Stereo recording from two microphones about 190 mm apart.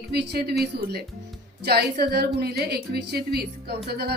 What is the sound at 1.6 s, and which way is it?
A woman's voice, 60° right (ahead or behind).